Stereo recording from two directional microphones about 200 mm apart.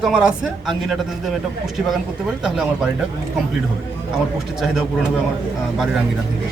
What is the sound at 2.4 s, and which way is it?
Speech, centre (ahead or behind).